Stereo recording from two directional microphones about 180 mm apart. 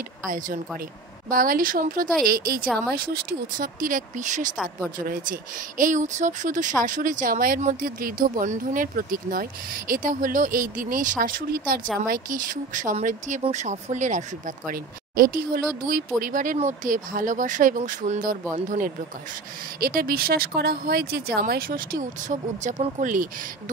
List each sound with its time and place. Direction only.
1.3 s speech: 50° right (ahead or behind)
19.8 s speech: 55° right (ahead or behind)